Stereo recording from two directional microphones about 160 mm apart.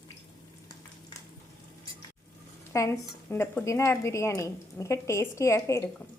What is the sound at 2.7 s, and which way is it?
A woman's voice, 20° left (ahead or behind).